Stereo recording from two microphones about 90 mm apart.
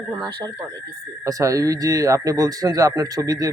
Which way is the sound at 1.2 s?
40° right (ahead or behind).